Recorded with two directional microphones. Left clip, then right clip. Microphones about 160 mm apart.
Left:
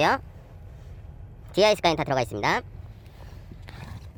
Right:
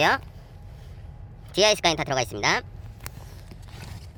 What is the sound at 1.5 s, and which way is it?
Speech, 25° left (ahead or behind).